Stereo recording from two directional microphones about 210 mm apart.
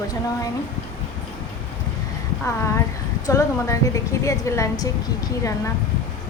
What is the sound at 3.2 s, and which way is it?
A woman's voice, 15° left (ahead or behind).